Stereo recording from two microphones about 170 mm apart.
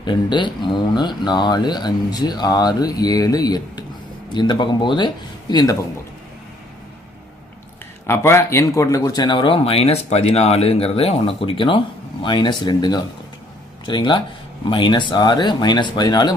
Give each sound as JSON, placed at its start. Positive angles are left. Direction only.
{"t": 0.0, "sound": "speech", "side_deg": 25}
{"t": 8.0, "sound": "speech", "side_deg": 15}